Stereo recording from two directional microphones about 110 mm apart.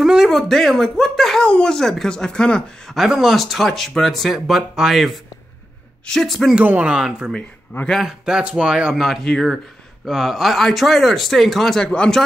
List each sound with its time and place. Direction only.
0.0 s speech: 5° right (ahead or behind)
6.6 s speech: 15° right (ahead or behind)
7.7 s speech: 5° left (ahead or behind)